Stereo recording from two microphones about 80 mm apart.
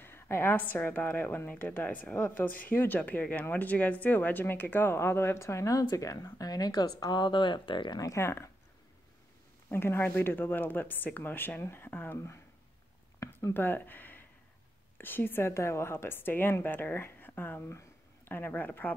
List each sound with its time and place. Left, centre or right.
0.0 s a woman's voice: left
8.0 s speech: left
9.7 s a woman's voice: left
13.5 s a woman's voice: left